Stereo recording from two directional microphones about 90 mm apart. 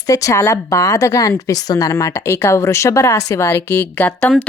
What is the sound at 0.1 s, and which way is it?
A woman's voice, 40° left (ahead or behind).